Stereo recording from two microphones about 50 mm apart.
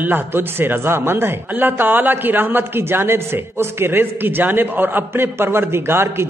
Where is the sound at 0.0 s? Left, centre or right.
Right.